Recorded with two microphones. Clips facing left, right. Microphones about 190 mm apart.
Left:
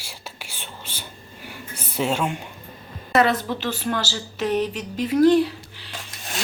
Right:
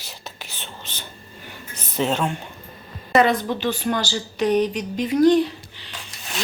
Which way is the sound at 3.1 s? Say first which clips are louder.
Right 2 dB; 5° left (ahead or behind).